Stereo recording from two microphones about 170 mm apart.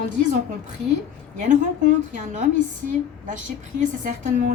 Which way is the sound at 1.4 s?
50° right (ahead or behind).